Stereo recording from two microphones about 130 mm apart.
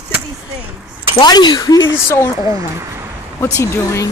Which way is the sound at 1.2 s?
35° left (ahead or behind).